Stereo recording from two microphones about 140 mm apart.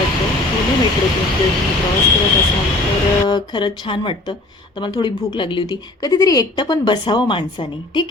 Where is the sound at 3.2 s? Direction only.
35° left (ahead or behind).